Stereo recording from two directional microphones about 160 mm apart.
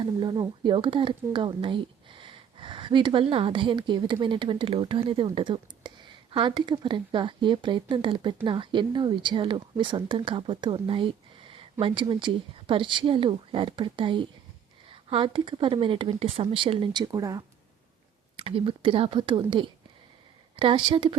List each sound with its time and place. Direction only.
0.0 s speech: 30° right (ahead or behind)
18.3 s speech: 35° right (ahead or behind)